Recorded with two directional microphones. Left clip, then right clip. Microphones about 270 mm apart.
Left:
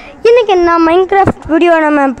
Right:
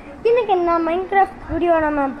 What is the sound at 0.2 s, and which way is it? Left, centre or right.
Speech, left.